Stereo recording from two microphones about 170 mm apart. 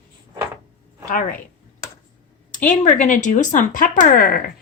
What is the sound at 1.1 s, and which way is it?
Speech, 50° left (ahead or behind).